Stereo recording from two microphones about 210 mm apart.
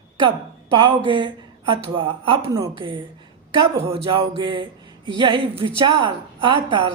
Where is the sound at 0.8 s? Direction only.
25° right (ahead or behind).